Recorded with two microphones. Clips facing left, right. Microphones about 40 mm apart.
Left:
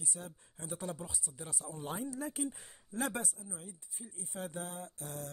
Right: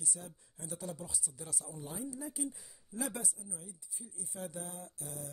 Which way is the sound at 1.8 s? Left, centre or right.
Left.